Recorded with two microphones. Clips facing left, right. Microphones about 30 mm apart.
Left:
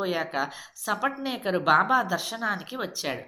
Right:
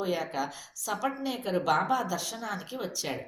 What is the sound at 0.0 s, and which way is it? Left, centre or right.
A woman's voice, left.